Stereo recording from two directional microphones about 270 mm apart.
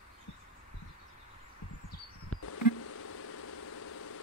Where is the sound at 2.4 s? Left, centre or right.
Left.